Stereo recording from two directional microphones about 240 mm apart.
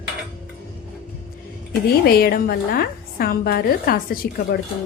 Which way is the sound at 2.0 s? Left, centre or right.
Left.